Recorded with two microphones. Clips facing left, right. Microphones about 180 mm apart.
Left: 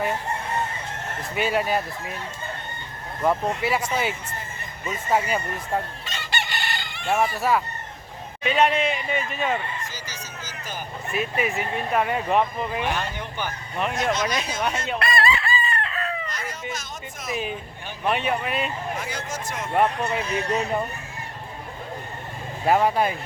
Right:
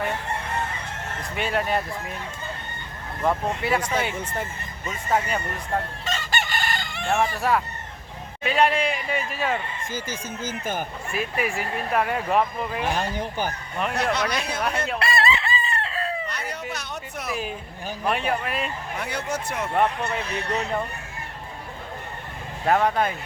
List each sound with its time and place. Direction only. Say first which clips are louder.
1.4 s speech: left 2 dB; 5° left (ahead or behind)
3.2 s speech: left 1 dB; 5° left (ahead or behind)
6.1 s chicken: right 3 dB; 45° right (ahead or behind)
7.1 s speech: left 1 dB; 5° left (ahead or behind)
9.9 s speech: right 7 dB; 50° right (ahead or behind)
11.1 s speech: left 2 dB; centre (ahead or behind)
12.9 s speech: right 2 dB; 35° right (ahead or behind)
13.9 s speech: even; 65° right (ahead or behind)
14.9 s chicken: left 2 dB; 25° right (ahead or behind)
16.3 s a sound: right 1 dB; 65° right (ahead or behind)
18.0 s speech: left 1 dB; centre (ahead or behind)
18.9 s speech: right 2 dB; 60° right (ahead or behind)
19.7 s speech: left 2 dB; 10° left (ahead or behind)
22.6 s speech: left 1 dB; 10° left (ahead or behind)